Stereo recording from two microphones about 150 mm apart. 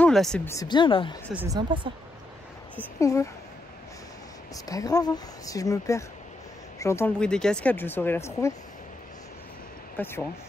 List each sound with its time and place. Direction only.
0.0 s a sound: 5° left (ahead or behind)
0.5 s speech: 25° left (ahead or behind)
1.5 s speech: 30° right (ahead or behind)
3.0 s speech: 20° left (ahead or behind)
4.6 s speech: 25° left (ahead or behind)
7.2 s speech: 5° left (ahead or behind)
9.9 s speech: 15° left (ahead or behind)